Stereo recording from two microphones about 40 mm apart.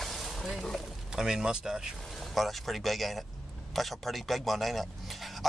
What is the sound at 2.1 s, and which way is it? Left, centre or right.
A man's voice, centre.